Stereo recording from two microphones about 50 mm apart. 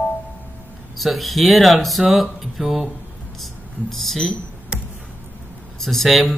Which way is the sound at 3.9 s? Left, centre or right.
Centre.